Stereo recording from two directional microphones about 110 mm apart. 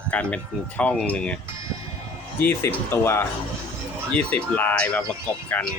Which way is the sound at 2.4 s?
20° left (ahead or behind).